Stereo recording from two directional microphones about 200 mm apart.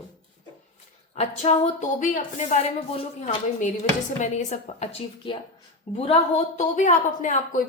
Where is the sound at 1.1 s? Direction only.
35° left (ahead or behind).